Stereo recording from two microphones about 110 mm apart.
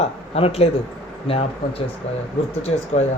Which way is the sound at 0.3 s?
65° left (ahead or behind).